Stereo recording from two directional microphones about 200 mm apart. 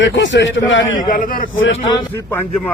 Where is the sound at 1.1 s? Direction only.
45° left (ahead or behind).